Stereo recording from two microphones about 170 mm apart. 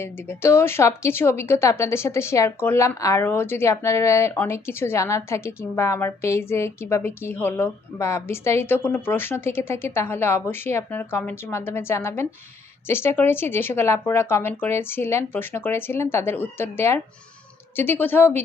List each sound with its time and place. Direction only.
0.0 s speech: 15° left (ahead or behind)